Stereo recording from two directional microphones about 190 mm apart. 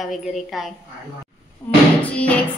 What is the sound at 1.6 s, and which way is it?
Music, 15° left (ahead or behind).